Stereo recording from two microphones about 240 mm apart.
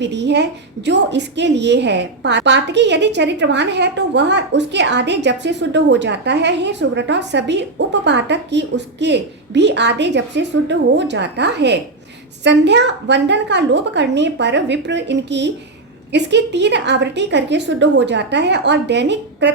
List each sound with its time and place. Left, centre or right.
0.0 s a woman's voice: right